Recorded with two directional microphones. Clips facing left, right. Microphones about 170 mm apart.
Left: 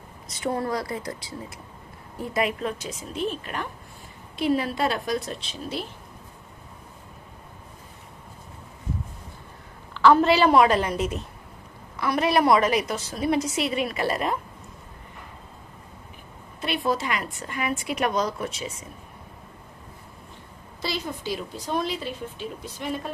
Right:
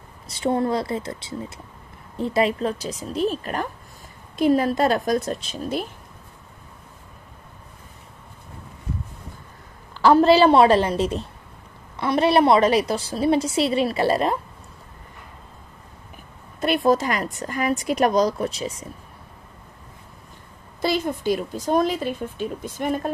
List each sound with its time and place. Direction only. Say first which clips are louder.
0.3 s a woman's voice: right 5 dB; 25° right (ahead or behind); by 5.9 s 45° right (ahead or behind)
9.9 s a woman's voice: right 3 dB; 35° right (ahead or behind)
16.8 s a woman's voice: right 6 dB; 40° right (ahead or behind)
20.8 s speech: right 8 dB; 50° right (ahead or behind)